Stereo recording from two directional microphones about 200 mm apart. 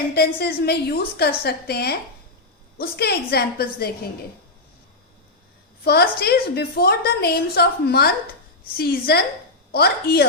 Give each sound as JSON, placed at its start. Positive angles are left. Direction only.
{"t": 0.1, "sound": "a woman's voice", "side_deg": 50}
{"t": 5.8, "sound": "a woman's voice", "side_deg": 55}